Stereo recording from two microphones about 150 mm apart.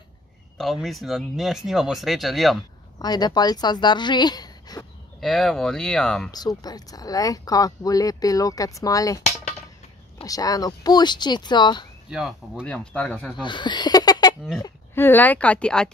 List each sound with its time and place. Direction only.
0.6 s speech: centre (ahead or behind)
3.0 s a woman's voice: 25° left (ahead or behind)
5.2 s speech: centre (ahead or behind)
6.3 s speech: 25° left (ahead or behind)
10.2 s speech: 25° left (ahead or behind)
12.1 s speech: 5° right (ahead or behind)
12.6 s speech: 10° left (ahead or behind)
13.4 s speech: 30° left (ahead or behind)
15.0 s speech: 15° left (ahead or behind)